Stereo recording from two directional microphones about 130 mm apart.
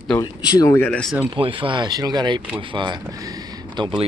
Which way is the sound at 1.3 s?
40° right (ahead or behind).